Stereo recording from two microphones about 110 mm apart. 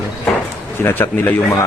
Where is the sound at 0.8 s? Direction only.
20° left (ahead or behind).